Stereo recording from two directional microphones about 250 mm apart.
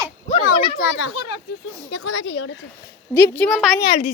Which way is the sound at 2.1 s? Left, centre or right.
Left.